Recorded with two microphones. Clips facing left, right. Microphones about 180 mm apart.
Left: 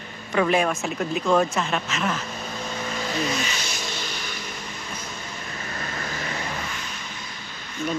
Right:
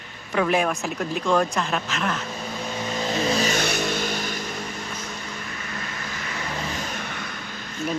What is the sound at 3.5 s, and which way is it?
Vehicle, 60° right (ahead or behind).